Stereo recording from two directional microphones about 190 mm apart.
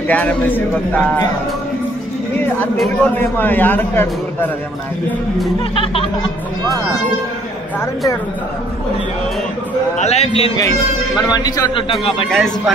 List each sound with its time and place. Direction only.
0.1 s a man's voice: 10° left (ahead or behind)
2.8 s a man's voice: 10° left (ahead or behind)
9.9 s a man's voice: 35° left (ahead or behind)
11.3 s a man's voice: 20° left (ahead or behind)
12.3 s speech: centre (ahead or behind)